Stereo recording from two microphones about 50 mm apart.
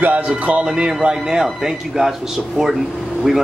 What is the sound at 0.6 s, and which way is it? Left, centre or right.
Speech, centre.